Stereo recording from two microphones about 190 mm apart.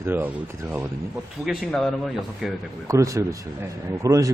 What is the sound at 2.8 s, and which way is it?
Speech, 15° right (ahead or behind).